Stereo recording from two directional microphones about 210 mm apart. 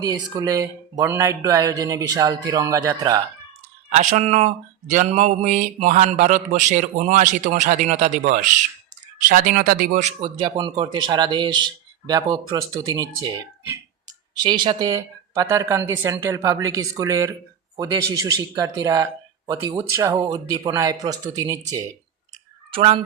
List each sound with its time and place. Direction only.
0.0 s speech: 15° right (ahead or behind)
3.9 s speech: 35° right (ahead or behind); by 21.9 s 15° right (ahead or behind)
22.7 s speech: 30° right (ahead or behind)